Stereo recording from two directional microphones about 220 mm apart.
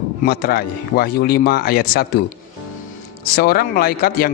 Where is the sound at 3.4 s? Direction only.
45° left (ahead or behind).